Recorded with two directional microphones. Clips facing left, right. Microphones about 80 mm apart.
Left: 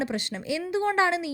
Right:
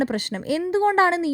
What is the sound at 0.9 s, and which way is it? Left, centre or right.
Speech, right.